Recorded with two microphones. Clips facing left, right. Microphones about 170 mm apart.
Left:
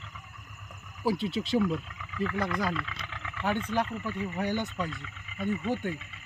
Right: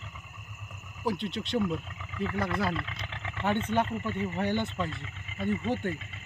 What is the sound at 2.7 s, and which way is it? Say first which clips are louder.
Vehicle: even; 30° right (ahead or behind).